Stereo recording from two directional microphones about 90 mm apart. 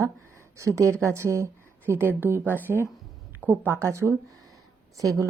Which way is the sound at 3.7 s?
30° right (ahead or behind).